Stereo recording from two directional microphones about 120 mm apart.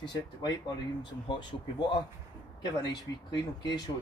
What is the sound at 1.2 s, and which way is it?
Speech, 40° left (ahead or behind).